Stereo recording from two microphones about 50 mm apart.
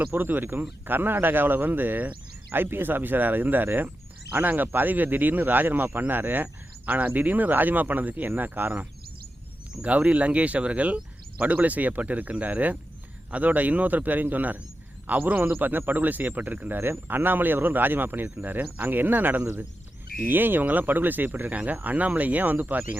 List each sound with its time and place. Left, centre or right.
0.0 s speech: right
9.8 s speech: right
16.7 s speech: right